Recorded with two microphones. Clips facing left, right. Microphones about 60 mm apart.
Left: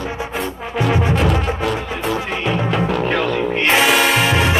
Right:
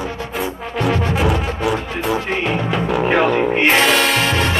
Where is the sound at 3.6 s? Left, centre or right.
Centre.